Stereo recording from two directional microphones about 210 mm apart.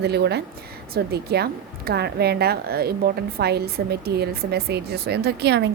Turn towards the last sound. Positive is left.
turn(degrees=-55)  # may be behind; listen again after turning